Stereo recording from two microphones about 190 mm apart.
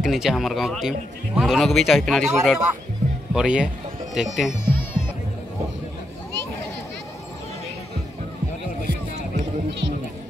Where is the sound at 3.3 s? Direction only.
5° right (ahead or behind).